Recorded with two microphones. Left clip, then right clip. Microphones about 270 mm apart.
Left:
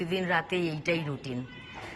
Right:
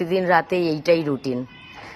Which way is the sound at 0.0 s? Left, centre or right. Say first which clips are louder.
Right 10 dB; centre.